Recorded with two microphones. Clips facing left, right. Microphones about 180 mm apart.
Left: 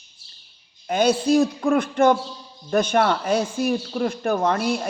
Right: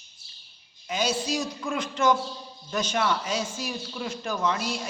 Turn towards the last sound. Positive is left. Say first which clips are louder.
# left 6 dB
turn(degrees=55)  # may be behind; listen again after turning